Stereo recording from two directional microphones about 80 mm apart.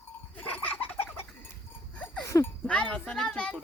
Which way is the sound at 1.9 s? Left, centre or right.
Centre.